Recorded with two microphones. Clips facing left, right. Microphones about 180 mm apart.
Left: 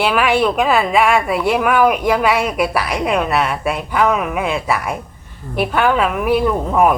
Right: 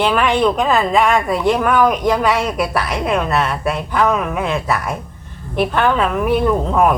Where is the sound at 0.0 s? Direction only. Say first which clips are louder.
Even; 10° left (ahead or behind).